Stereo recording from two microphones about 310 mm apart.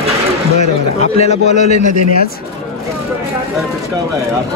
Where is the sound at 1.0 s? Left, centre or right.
Centre.